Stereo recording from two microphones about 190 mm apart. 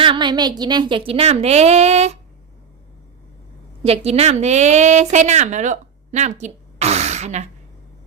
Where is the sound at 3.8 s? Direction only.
30° right (ahead or behind).